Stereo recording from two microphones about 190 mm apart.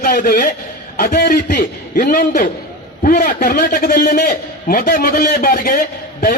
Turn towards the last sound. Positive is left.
turn(degrees=45)  # may be behind; listen again after turning